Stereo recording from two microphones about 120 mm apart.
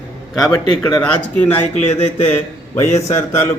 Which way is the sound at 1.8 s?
60° left (ahead or behind).